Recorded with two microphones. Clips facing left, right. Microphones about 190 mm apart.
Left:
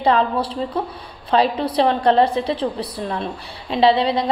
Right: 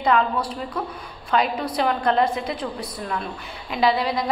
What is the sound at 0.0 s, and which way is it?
A woman's voice, 30° left (ahead or behind).